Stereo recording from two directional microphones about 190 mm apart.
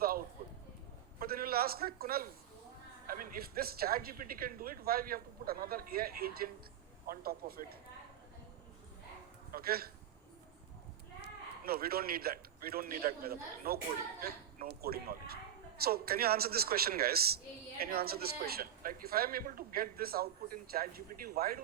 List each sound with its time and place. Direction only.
0.0 s a sound: 50° right (ahead or behind)
1.2 s a man's voice: 50° right (ahead or behind)
9.5 s speech: 50° right (ahead or behind)
11.2 s a man's voice: 50° right (ahead or behind)